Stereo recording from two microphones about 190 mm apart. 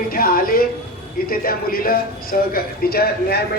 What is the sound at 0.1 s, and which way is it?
A woman's voice, 50° left (ahead or behind).